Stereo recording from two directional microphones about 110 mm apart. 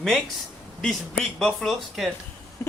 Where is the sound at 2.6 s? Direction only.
25° left (ahead or behind).